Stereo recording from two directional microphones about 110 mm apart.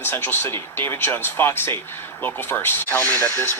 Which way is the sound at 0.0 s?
20° left (ahead or behind).